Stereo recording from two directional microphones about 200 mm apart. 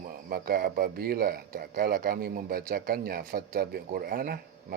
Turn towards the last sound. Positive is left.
turn(degrees=-50)  # may be behind; listen again after turning